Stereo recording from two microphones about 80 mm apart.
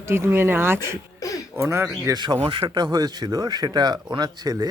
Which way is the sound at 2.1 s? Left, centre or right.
Right.